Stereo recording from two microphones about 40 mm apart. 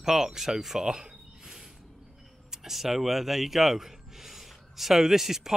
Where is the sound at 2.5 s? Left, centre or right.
Centre.